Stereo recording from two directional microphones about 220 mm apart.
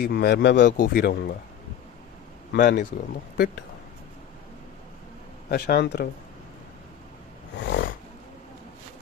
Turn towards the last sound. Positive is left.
turn(degrees=50)  # may be behind; listen again after turning